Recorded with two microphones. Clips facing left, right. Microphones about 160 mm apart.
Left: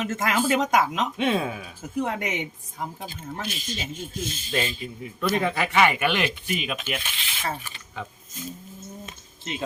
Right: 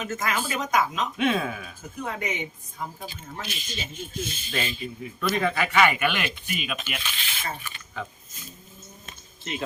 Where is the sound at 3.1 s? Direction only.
50° left (ahead or behind).